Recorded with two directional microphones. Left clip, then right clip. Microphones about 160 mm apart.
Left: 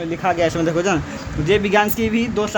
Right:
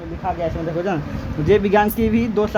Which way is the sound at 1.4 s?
Centre (ahead or behind).